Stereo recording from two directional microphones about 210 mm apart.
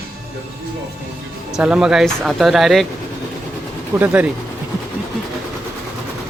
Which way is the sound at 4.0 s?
10° right (ahead or behind).